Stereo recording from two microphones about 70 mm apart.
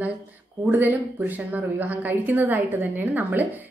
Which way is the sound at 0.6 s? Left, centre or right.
Right.